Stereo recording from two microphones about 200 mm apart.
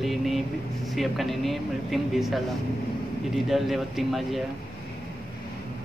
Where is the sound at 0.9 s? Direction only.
Centre (ahead or behind).